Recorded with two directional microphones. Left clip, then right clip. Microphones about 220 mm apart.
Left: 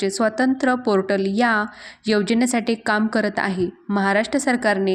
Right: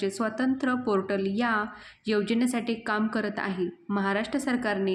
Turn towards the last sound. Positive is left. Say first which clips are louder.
# left 8 dB
turn(degrees=35)  # may be behind; listen again after turning